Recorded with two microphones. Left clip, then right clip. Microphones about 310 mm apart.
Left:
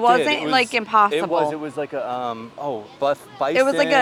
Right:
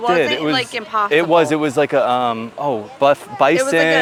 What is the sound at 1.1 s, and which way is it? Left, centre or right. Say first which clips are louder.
Speech: right 7 dB; right.